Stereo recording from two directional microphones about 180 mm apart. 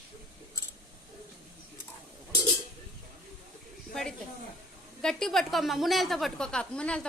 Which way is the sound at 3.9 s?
5° left (ahead or behind).